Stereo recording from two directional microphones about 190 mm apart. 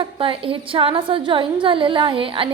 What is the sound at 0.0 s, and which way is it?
A woman's voice, 30° right (ahead or behind).